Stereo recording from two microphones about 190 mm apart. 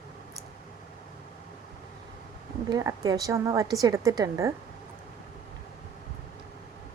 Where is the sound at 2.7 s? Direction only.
20° right (ahead or behind).